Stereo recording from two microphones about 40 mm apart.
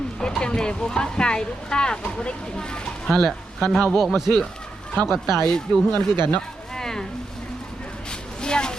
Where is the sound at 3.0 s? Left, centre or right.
Centre.